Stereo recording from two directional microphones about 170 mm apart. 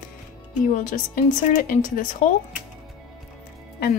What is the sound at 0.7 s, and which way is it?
Speech, 50° left (ahead or behind).